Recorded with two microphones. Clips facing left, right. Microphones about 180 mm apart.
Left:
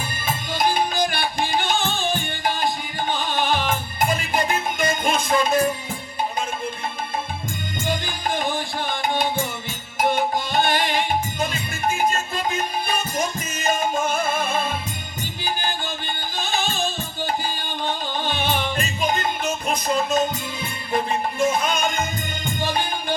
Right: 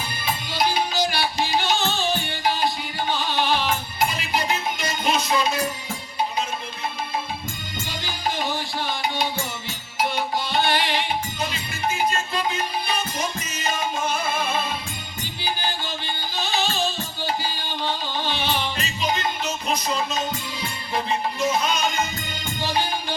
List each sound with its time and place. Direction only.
0.3 s music: 50° left (ahead or behind)
7.9 s music: 50° left (ahead or behind)
16.4 s music: 50° left (ahead or behind)